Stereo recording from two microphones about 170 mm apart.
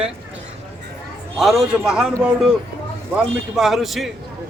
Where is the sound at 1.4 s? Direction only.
Centre (ahead or behind).